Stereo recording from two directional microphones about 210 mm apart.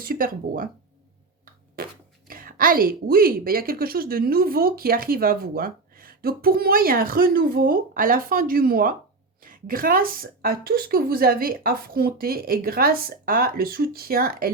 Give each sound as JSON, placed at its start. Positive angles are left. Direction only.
{"t": 0.0, "sound": "speech", "side_deg": -40}
{"t": 1.7, "sound": "speech", "side_deg": -45}